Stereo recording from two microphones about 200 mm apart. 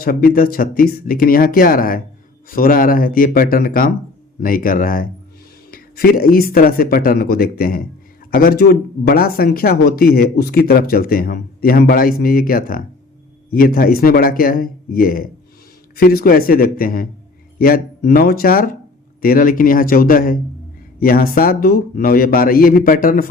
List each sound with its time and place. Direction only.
0.0 s speech: 50° left (ahead or behind)